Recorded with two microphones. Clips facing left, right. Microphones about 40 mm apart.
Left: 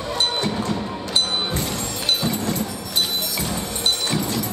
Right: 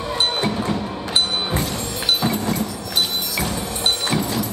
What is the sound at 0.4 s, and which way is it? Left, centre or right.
Music, centre.